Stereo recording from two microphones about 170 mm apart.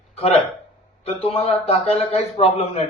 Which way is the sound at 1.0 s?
35° left (ahead or behind).